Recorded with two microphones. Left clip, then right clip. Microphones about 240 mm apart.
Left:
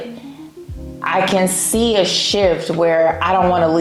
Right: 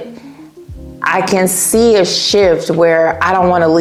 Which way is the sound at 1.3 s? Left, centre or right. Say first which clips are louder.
Right 5 dB; right.